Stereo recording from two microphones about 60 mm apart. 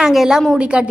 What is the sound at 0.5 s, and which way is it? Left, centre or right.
Speech, centre.